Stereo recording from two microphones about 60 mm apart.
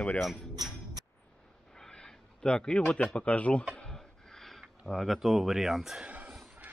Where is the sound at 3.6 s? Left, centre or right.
Centre.